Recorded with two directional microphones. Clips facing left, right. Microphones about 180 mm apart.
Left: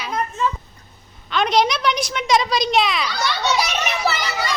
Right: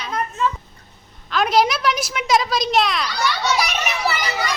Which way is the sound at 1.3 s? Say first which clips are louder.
Right 1 dB; 5° right (ahead or behind).